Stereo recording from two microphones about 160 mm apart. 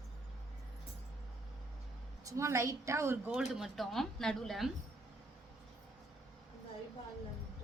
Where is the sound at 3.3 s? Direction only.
Centre (ahead or behind).